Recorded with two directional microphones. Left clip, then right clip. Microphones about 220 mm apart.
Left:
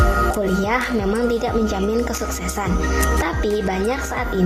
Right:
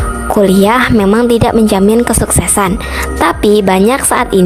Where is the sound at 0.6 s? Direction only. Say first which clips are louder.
Right 11 dB; 45° right (ahead or behind).